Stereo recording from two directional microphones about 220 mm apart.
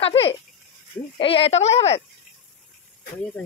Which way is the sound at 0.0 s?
25° left (ahead or behind).